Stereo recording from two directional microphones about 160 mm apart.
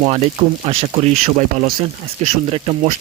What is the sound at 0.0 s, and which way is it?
Speech, 40° right (ahead or behind).